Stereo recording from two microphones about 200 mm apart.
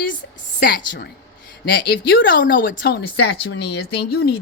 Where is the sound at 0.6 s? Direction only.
45° left (ahead or behind).